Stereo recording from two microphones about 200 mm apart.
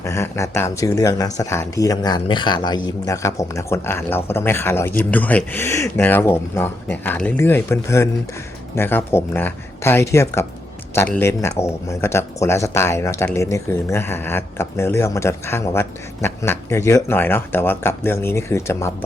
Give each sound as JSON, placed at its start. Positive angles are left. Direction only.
{"t": 0.0, "sound": "speech", "side_deg": 15}